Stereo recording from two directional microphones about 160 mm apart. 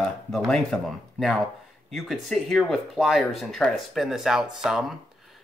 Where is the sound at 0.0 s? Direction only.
5° left (ahead or behind).